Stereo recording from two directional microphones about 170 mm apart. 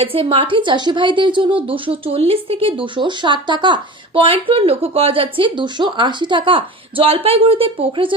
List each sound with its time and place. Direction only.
0.0 s speech: 35° right (ahead or behind)